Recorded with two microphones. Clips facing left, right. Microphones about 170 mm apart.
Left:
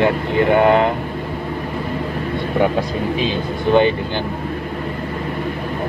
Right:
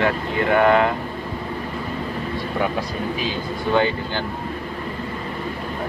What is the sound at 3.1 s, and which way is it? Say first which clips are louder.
Speech: left 5 dB; 20° left (ahead or behind).